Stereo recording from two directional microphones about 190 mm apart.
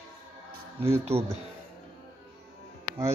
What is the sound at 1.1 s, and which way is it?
Speech, 15° right (ahead or behind).